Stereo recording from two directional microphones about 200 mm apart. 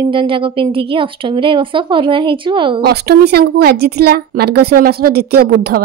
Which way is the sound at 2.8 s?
50° right (ahead or behind).